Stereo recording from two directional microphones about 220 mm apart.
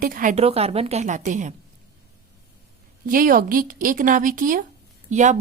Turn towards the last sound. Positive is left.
turn(degrees=-30)  # may be behind; listen again after turning